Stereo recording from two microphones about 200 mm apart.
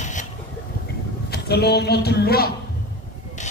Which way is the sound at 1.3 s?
55° left (ahead or behind).